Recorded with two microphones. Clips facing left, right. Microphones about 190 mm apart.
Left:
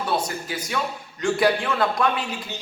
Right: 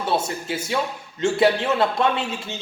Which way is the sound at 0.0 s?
25° right (ahead or behind).